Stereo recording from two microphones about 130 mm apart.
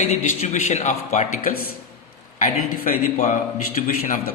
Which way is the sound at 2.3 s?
85° left.